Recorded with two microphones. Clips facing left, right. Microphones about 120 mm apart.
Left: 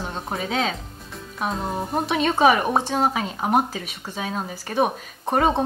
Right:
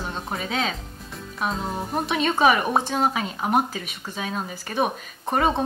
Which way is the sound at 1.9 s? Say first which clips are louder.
Left 1 dB; 25° left (ahead or behind).